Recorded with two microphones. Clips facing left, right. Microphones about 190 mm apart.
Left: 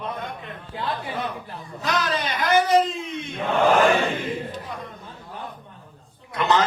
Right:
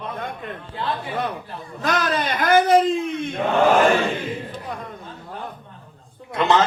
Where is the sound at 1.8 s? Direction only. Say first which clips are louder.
Right 3 dB; 50° right (ahead or behind).